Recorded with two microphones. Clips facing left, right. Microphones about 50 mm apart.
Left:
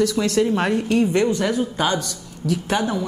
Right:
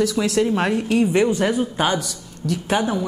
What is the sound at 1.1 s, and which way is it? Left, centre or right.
A woman's voice, centre.